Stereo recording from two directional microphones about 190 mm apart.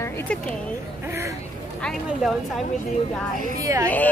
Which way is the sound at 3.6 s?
15° right (ahead or behind).